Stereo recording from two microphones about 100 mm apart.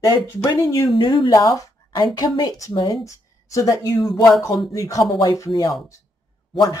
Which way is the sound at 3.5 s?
35° left (ahead or behind).